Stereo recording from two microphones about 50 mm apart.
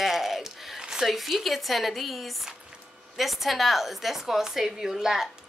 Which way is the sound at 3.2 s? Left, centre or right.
Centre.